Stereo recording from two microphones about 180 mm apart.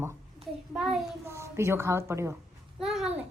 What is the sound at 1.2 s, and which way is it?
A woman's voice, 15° right (ahead or behind).